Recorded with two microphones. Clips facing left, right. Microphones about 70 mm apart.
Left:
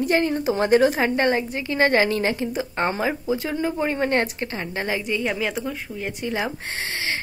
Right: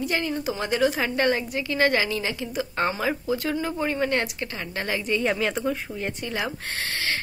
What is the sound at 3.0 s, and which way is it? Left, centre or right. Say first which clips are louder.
Speech: left 2 dB; centre.